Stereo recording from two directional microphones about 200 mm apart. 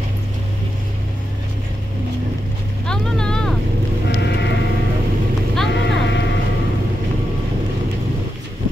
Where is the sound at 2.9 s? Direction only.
5° left (ahead or behind).